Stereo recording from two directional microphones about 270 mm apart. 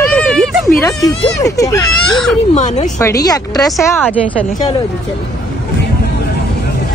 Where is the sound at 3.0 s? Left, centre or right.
Centre.